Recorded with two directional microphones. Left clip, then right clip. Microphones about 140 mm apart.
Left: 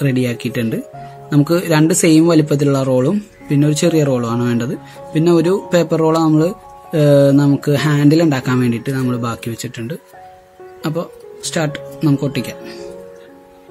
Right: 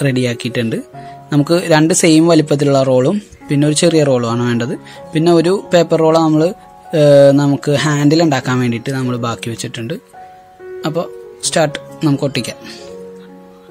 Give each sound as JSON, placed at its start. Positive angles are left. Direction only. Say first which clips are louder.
{"t": 0.0, "sound": "speech", "louder": "right 2 dB", "side_deg": -40}